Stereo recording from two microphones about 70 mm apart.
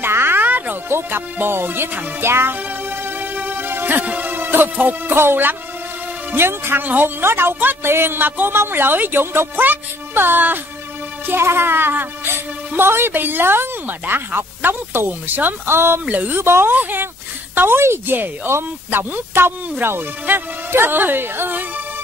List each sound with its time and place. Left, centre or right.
0.0 s music: right
6.3 s speech: right